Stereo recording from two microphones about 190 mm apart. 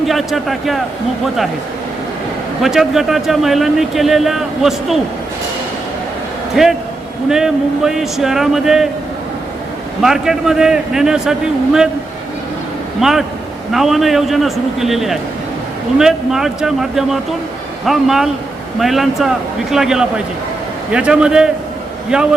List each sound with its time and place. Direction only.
0.0 s speech: centre (ahead or behind)
2.6 s a man's voice: centre (ahead or behind)
6.6 s a man's voice: 5° right (ahead or behind)
10.0 s a man's voice: centre (ahead or behind)
13.0 s a man's voice: centre (ahead or behind)